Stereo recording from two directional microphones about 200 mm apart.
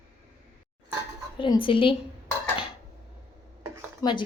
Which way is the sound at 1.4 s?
25° left (ahead or behind).